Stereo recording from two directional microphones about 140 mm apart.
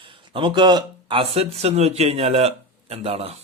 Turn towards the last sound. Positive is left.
turn(degrees=-45)  # may be behind; listen again after turning